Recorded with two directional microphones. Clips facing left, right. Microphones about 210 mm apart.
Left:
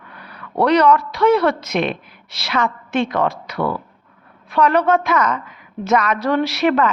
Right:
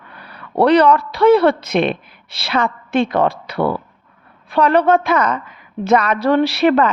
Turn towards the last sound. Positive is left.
turn(degrees=-35)  # may be behind; listen again after turning